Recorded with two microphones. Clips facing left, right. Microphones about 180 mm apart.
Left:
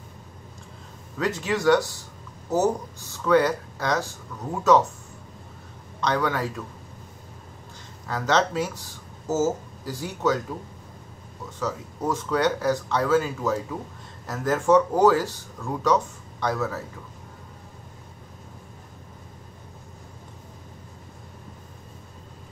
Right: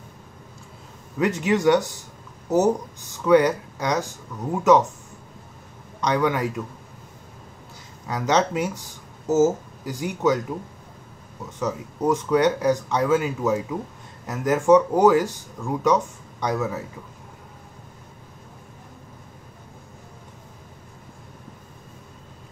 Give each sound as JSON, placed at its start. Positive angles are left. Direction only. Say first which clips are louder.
{"t": 1.1, "sound": "speech", "louder": "right 4 dB", "side_deg": -15}
{"t": 5.9, "sound": "speech", "louder": "right 3 dB", "side_deg": -15}
{"t": 8.1, "sound": "speech", "louder": "right 2 dB", "side_deg": -15}
{"t": 11.6, "sound": "speech", "louder": "right 4 dB", "side_deg": -15}